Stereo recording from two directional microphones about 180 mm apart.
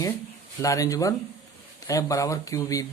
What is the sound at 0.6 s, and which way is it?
Speech, 20° left (ahead or behind).